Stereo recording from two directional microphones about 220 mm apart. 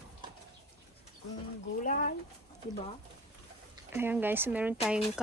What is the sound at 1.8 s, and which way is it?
Speech, 35° left (ahead or behind).